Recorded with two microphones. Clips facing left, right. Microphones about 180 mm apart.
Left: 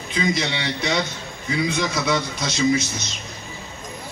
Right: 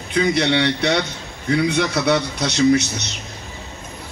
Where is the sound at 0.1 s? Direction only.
65° right (ahead or behind).